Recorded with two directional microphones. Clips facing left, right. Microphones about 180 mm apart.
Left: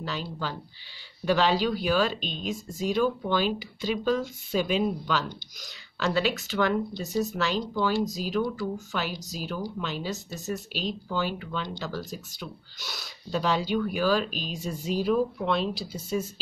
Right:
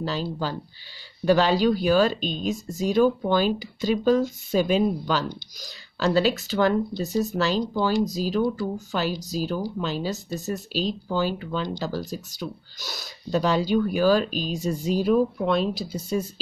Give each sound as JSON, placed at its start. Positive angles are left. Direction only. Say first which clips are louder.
{"t": 0.0, "sound": "speech", "louder": "right 6 dB", "side_deg": -35}